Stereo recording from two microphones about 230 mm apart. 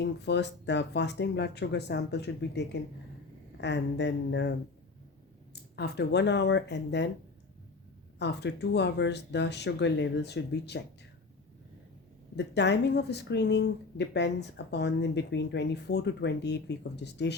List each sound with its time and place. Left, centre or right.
0.0 s speech: left
5.7 s speech: left
8.2 s speech: left
12.4 s speech: left